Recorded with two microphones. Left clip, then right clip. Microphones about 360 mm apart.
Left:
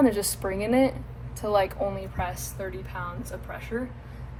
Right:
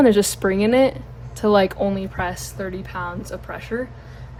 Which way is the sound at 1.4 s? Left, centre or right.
Right.